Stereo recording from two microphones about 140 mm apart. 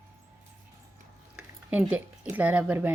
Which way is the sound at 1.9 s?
10° right (ahead or behind).